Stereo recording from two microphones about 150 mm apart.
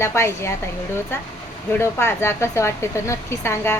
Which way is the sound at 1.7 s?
15° left (ahead or behind).